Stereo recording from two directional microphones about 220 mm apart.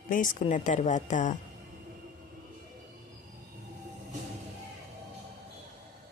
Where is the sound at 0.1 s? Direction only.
35° left (ahead or behind).